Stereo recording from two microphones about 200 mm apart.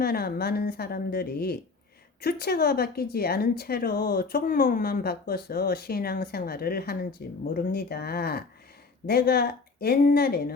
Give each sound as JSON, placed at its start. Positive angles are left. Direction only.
{"t": 0.0, "sound": "a woman's voice", "side_deg": 50}